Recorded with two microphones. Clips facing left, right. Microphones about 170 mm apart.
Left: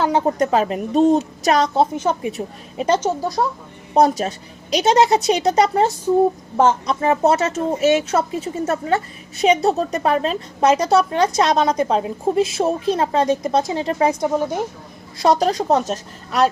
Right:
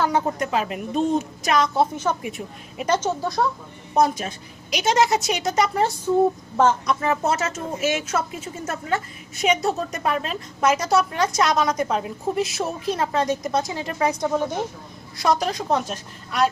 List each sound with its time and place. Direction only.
0.0 s a woman's voice: 30° left (ahead or behind)
1.7 s a woman's voice: 25° left (ahead or behind)
3.0 s speech: 15° left (ahead or behind)
3.9 s a woman's voice: 35° left (ahead or behind)